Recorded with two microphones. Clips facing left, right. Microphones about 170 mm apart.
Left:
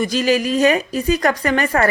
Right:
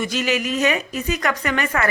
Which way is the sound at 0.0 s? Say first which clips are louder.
Left 5 dB; 35° left (ahead or behind).